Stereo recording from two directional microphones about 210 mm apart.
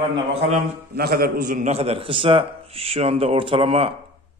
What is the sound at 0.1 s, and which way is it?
Speech, 30° right (ahead or behind).